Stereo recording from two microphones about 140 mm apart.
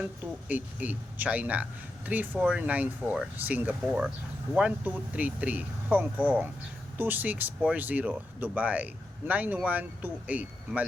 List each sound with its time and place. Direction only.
0.0 s speech: 10° right (ahead or behind)